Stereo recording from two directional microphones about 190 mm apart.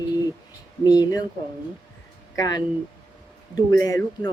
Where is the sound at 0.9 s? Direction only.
20° left (ahead or behind).